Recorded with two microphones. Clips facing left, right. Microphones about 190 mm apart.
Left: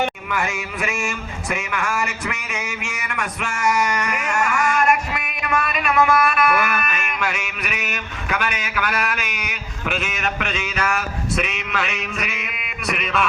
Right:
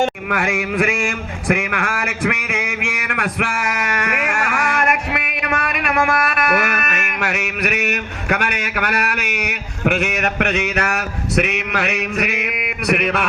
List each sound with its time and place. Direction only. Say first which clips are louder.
0.0 s a man's voice: right 4 dB; 55° right (ahead or behind)